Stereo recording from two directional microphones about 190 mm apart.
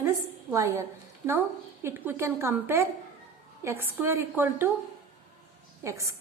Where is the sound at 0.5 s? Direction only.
15° right (ahead or behind).